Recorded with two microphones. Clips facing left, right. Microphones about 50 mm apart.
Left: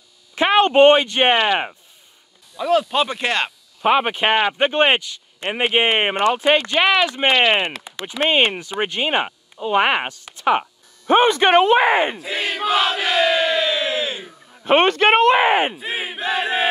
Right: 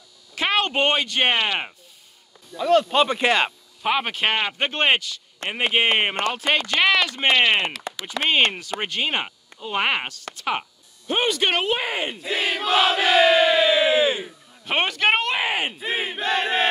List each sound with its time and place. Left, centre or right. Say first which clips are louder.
0.3 s speech: left 7 dB; centre
2.5 s speech: even; centre
3.8 s speech: left 5 dB; centre
11.1 s speech: left 8 dB; left
12.2 s crowd: left 1 dB; centre
14.5 s a sound: left 11 dB; left
14.8 s speech: left 5 dB; left
15.8 s battle cry: even; centre